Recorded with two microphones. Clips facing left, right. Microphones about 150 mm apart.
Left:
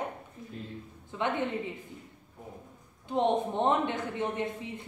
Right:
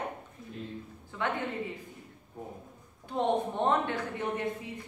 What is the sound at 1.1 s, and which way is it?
Speech, 20° left (ahead or behind).